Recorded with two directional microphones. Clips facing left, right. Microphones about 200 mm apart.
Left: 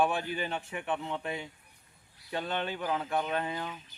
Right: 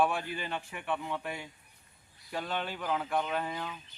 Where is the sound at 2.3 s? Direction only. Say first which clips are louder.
Left 2 dB; centre (ahead or behind).